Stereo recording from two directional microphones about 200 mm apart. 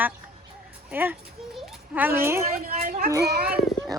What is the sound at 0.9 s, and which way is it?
A child's voice, 10° right (ahead or behind).